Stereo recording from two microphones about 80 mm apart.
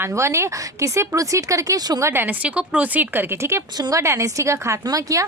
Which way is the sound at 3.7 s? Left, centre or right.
Right.